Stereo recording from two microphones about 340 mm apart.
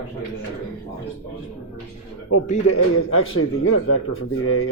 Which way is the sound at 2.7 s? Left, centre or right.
Left.